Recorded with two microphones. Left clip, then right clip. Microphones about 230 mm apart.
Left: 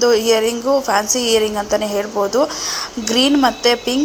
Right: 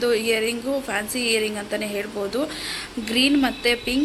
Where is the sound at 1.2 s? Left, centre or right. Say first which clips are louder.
Left 7 dB; left.